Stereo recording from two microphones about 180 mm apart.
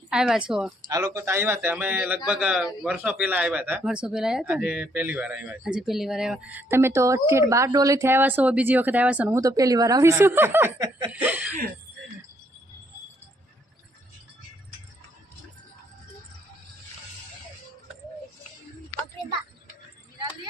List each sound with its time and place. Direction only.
0.1 s speech: 5° right (ahead or behind)
0.8 s speech: 20° right (ahead or behind)
9.4 s speech: 20° right (ahead or behind)
11.1 s speech: 10° right (ahead or behind)